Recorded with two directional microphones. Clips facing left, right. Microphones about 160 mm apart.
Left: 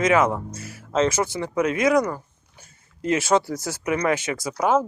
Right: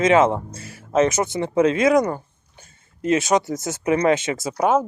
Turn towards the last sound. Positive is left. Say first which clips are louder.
# right 2 dB
turn(degrees=-20)  # may be behind; listen again after turning